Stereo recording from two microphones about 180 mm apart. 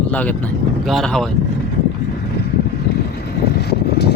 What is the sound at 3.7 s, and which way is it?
Vehicle, 65° left (ahead or behind).